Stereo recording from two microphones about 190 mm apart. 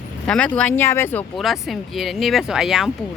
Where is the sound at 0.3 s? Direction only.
5° left (ahead or behind).